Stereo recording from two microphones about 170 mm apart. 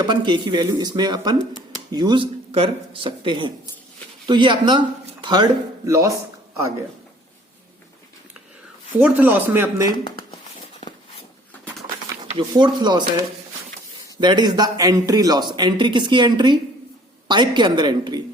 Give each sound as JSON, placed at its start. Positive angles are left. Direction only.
{"t": 0.0, "sound": "a man's voice", "side_deg": -25}
{"t": 9.0, "sound": "speech", "side_deg": -10}
{"t": 10.0, "sound": "a sound", "side_deg": 30}
{"t": 12.4, "sound": "a man's voice", "side_deg": -25}
{"t": 14.2, "sound": "a man's voice", "side_deg": -25}